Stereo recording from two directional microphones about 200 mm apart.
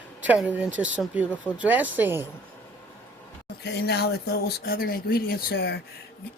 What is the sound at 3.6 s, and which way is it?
Speech, 55° left (ahead or behind).